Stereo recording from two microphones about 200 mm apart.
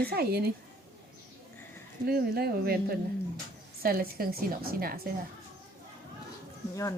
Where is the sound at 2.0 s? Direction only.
50° right (ahead or behind).